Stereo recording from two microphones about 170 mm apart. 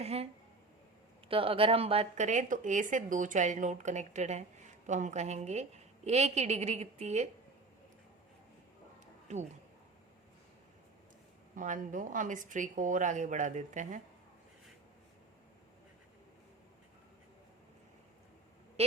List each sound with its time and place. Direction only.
0.0 s speech: 35° right (ahead or behind)
1.3 s a woman's voice: 30° right (ahead or behind)
9.2 s speech: 40° right (ahead or behind)
11.5 s a woman's voice: 50° right (ahead or behind)
18.8 s speech: 35° right (ahead or behind)